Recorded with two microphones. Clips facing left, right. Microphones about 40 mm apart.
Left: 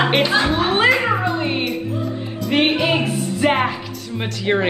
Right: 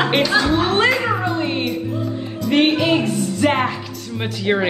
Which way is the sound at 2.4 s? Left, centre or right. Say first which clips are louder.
Right 2 dB; centre.